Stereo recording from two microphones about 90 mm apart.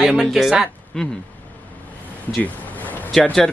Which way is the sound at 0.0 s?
10° right (ahead or behind).